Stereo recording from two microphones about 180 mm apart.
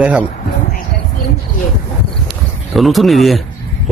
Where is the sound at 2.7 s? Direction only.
Centre (ahead or behind).